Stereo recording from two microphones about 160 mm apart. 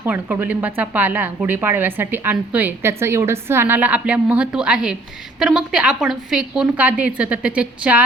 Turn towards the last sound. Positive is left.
turn(degrees=-10)  # may be behind; listen again after turning